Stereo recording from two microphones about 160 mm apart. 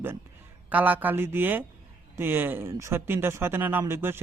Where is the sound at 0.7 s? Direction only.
10° right (ahead or behind).